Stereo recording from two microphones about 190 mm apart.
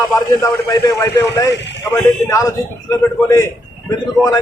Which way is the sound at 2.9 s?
15° left (ahead or behind).